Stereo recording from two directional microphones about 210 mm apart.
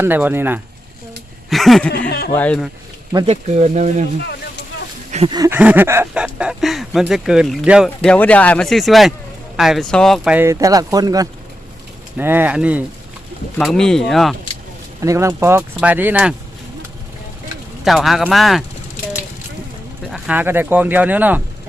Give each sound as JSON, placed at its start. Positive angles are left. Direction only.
{"t": 0.0, "sound": "speech", "side_deg": -10}
{"t": 1.5, "sound": "a sound", "side_deg": 0}
{"t": 2.0, "sound": "speech", "side_deg": 50}
{"t": 2.3, "sound": "speech", "side_deg": 5}
{"t": 3.2, "sound": "speech", "side_deg": -35}
{"t": 5.1, "sound": "a sound", "side_deg": -30}
{"t": 5.4, "sound": "speech", "side_deg": -10}
{"t": 15.0, "sound": "speech", "side_deg": -15}
{"t": 17.8, "sound": "speech", "side_deg": 0}
{"t": 20.1, "sound": "speech", "side_deg": 0}